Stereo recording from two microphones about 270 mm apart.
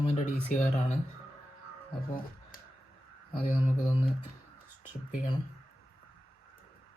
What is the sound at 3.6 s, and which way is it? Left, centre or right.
Speech, centre.